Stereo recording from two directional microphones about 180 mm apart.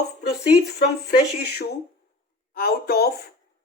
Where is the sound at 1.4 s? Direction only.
65° left (ahead or behind).